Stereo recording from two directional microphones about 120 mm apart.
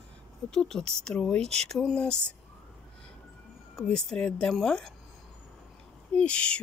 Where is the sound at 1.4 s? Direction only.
65° right (ahead or behind).